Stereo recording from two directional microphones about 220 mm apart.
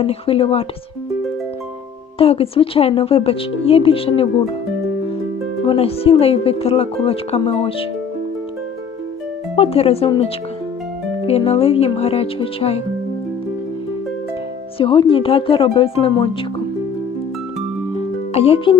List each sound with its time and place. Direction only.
0.0 s speech: 25° left (ahead or behind)
2.1 s speech: 25° left (ahead or behind)
5.6 s speech: 25° left (ahead or behind)
9.6 s speech: 25° left (ahead or behind)
14.8 s speech: 25° left (ahead or behind)
17.9 s music: 25° left (ahead or behind)